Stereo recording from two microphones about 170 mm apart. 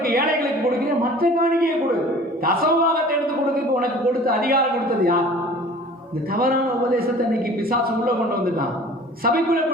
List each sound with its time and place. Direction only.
0.0 s a sound: 60° right (ahead or behind)
1.2 s a man's voice: 60° right (ahead or behind)
6.3 s a man's voice: 60° right (ahead or behind)